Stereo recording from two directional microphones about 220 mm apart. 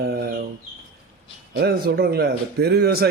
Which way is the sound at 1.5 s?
45° right (ahead or behind).